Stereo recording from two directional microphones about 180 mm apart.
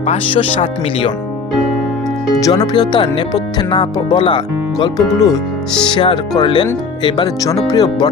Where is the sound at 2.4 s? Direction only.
20° left (ahead or behind).